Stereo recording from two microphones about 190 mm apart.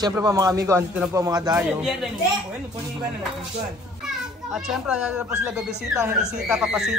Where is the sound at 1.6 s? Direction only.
5° right (ahead or behind).